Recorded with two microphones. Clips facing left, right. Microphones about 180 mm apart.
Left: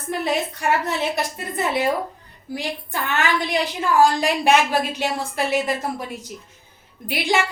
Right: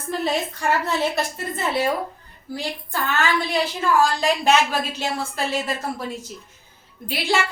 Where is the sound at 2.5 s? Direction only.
20° left (ahead or behind).